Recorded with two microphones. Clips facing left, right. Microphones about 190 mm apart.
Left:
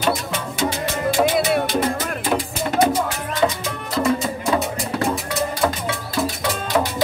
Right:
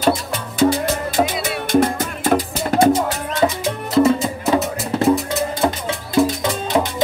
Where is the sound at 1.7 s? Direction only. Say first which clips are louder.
Right 5 dB; 50° right (ahead or behind).